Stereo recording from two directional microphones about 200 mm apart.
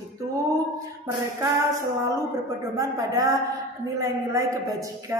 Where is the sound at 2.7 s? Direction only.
15° right (ahead or behind).